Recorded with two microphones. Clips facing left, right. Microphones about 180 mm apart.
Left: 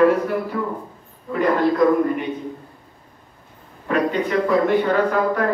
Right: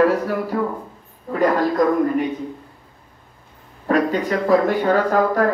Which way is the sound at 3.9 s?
40° right (ahead or behind).